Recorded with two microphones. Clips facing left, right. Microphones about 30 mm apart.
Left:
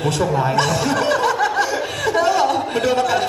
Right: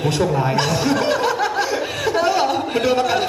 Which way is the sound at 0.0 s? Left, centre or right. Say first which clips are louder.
Even; centre.